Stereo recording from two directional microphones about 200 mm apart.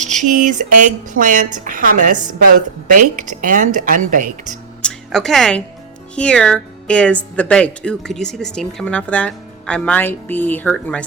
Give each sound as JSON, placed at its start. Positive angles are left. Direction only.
{"t": 0.0, "sound": "speech", "side_deg": -40}
{"t": 4.8, "sound": "a woman's voice", "side_deg": 5}